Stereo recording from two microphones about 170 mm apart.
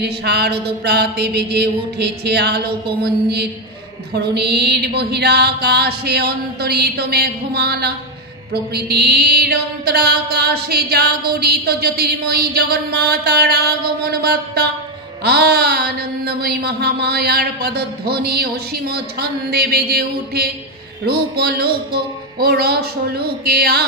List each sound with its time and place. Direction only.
0.0 s mantra: 75° right (ahead or behind)